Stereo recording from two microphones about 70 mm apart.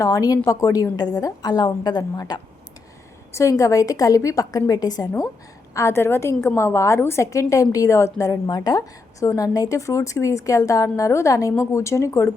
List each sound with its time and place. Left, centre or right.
0.0 s a woman's voice: left
3.5 s a woman's voice: left
5.7 s a woman's voice: left
8.4 s a woman's voice: left
9.2 s a woman's voice: left